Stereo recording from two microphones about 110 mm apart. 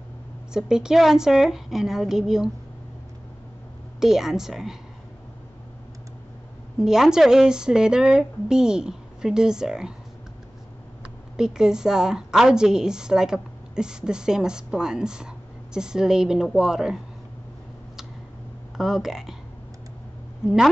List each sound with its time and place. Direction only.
0.5 s a woman's voice: 5° right (ahead or behind)
4.0 s a woman's voice: 5° right (ahead or behind)
6.8 s a woman's voice: 5° right (ahead or behind)
11.0 s a woman's voice: 5° right (ahead or behind)
18.8 s a woman's voice: 5° right (ahead or behind)
20.4 s a woman's voice: 5° right (ahead or behind)